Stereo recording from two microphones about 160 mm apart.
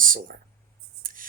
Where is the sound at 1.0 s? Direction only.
60° right (ahead or behind).